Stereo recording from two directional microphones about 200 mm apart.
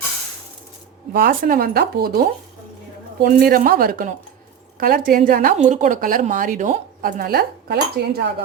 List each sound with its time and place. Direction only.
1.1 s a woman's voice: 45° right (ahead or behind)